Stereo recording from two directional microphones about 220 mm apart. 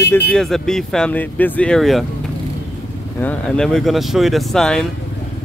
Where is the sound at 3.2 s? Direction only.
5° left (ahead or behind).